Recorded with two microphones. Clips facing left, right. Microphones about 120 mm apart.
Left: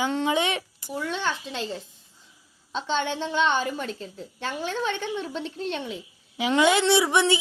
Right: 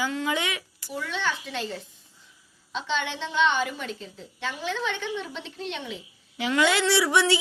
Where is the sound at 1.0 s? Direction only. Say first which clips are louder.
Left 1 dB; 35° left (ahead or behind).